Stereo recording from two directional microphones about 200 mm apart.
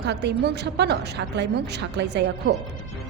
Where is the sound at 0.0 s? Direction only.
60° right (ahead or behind).